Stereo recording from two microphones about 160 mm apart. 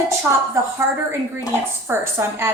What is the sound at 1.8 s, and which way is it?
Speech, 15° right (ahead or behind).